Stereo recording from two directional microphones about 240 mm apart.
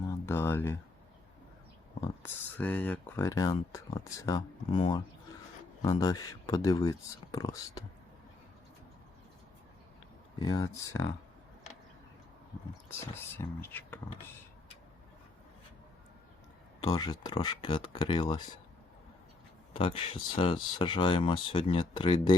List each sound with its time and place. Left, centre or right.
0.3 s a sound: centre
2.2 s speech: centre
10.3 s speech: centre
12.9 s speech: centre
16.8 s speech: centre
19.7 s speech: left